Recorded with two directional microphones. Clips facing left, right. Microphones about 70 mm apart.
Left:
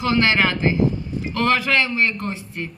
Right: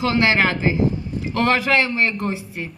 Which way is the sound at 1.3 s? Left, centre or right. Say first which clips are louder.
Right 1 dB; centre.